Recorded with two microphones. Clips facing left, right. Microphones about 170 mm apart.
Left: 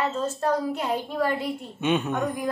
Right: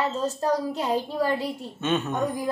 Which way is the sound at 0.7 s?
35° right (ahead or behind).